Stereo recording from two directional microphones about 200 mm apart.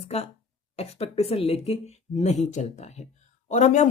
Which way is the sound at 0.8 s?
30° left (ahead or behind).